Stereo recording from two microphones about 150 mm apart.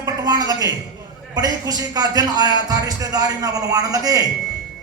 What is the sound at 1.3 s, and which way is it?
A man's voice, 25° right (ahead or behind).